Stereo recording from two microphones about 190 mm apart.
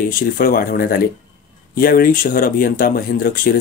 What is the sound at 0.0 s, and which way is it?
Speech, 50° left (ahead or behind).